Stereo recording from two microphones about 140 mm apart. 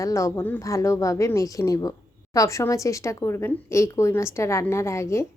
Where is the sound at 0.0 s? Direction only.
20° left (ahead or behind).